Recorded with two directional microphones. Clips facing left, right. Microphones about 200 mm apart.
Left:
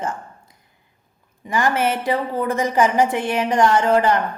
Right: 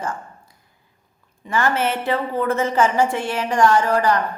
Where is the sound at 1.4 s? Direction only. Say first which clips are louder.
Left 1 dB; 15° left (ahead or behind).